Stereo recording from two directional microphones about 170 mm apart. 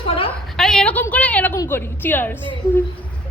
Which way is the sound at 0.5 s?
Centre (ahead or behind).